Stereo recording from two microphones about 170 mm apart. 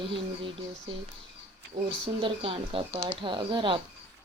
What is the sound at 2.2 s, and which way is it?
Speech, 30° right (ahead or behind).